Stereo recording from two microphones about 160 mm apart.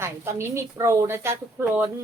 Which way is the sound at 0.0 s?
15° right (ahead or behind).